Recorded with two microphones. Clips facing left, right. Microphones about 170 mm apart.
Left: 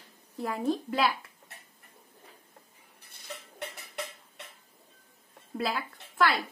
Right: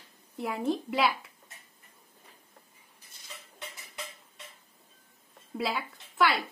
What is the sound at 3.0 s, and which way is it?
Dishes, 60° left (ahead or behind).